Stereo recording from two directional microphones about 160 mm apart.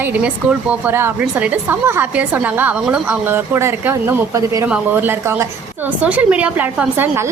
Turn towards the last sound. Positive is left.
turn(degrees=-10)  # may be behind; listen again after turning